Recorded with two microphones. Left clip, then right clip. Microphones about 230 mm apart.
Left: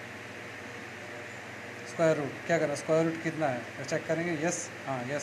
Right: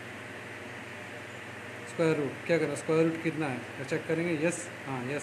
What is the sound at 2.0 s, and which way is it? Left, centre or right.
Speech, centre.